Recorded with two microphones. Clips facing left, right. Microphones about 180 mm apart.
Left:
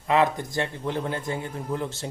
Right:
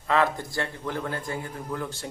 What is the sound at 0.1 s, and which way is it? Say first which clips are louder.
Speech: left 2 dB; 20° left (ahead or behind).